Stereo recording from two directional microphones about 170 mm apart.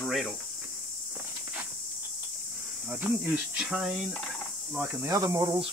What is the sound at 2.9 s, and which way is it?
Speech, 10° right (ahead or behind).